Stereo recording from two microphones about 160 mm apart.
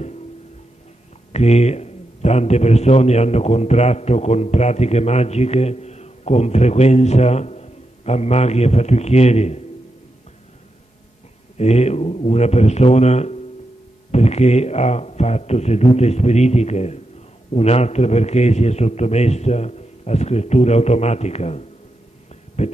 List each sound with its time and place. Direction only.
1.3 s a man's voice: 40° left (ahead or behind)
11.5 s a man's voice: 45° left (ahead or behind)